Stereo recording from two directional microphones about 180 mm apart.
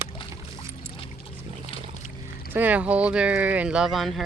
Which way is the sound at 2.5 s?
10° right (ahead or behind).